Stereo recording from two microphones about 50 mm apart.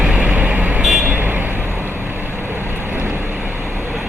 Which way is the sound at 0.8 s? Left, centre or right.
Centre.